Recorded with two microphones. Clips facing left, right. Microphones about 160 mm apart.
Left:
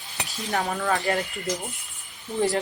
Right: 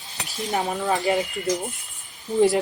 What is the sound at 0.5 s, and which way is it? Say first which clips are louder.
Speech: right 1 dB; 20° right (ahead or behind).